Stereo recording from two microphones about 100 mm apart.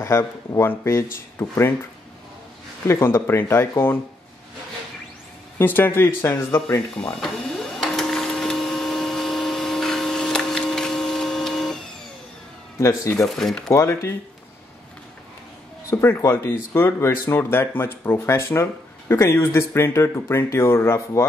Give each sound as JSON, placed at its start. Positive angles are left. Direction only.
{"t": 0.0, "sound": "speech", "side_deg": 30}
{"t": 2.9, "sound": "speech", "side_deg": 25}
{"t": 5.6, "sound": "speech", "side_deg": 20}
{"t": 7.0, "sound": "printer", "side_deg": 5}
{"t": 12.7, "sound": "speech", "side_deg": 30}
{"t": 13.4, "sound": "speech", "side_deg": 5}
{"t": 13.7, "sound": "speech", "side_deg": 30}
{"t": 15.9, "sound": "speech", "side_deg": 25}